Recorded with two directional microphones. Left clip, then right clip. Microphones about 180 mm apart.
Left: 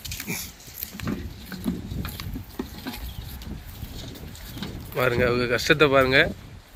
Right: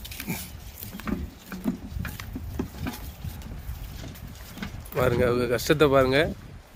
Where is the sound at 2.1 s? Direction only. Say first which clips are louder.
Even; centre (ahead or behind).